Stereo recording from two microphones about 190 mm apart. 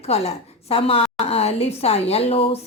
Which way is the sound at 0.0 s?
35° left (ahead or behind).